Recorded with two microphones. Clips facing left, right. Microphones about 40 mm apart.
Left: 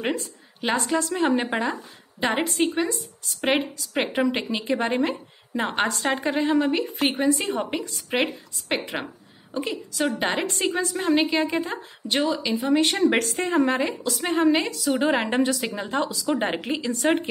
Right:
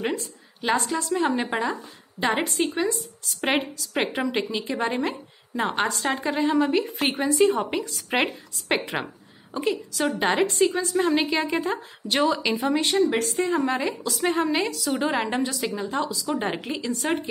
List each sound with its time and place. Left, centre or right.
0.6 s a woman's voice: left
1.1 s a woman's voice: centre
8.1 s a woman's voice: centre
12.2 s speech: centre
12.8 s a woman's voice: left
13.7 s a woman's voice: centre
15.0 s speech: centre